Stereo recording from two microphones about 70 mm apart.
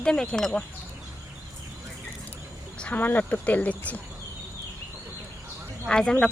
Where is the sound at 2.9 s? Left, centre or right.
Left.